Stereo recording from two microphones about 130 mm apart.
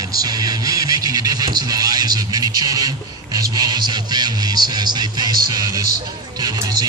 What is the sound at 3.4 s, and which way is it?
Speech, 30° right (ahead or behind).